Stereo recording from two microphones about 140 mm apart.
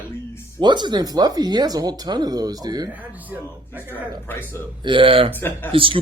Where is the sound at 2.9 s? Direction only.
10° right (ahead or behind).